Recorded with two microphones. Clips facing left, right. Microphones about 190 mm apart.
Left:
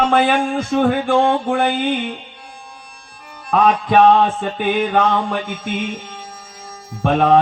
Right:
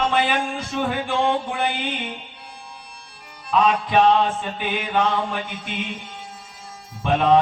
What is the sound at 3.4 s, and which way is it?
Music, 55° left (ahead or behind).